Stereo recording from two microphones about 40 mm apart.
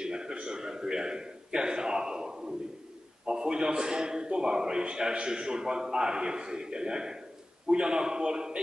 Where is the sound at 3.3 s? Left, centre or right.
Right.